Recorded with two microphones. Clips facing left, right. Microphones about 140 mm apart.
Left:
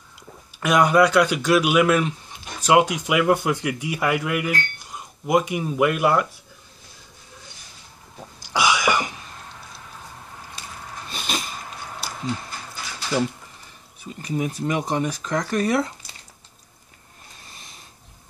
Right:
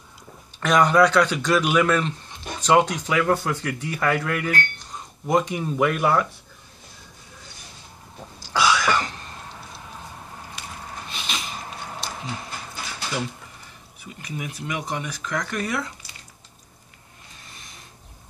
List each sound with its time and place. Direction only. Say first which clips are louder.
0.6 s speech: even; 10° left (ahead or behind)
8.4 s throat clearing: even; 15° left (ahead or behind)
11.1 s a sound: left 4 dB; 40° left (ahead or behind)
14.0 s speech: left 7 dB; 30° left (ahead or behind)